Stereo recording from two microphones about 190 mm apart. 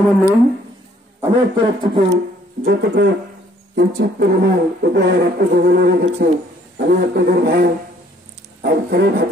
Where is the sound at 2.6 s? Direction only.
60° right (ahead or behind).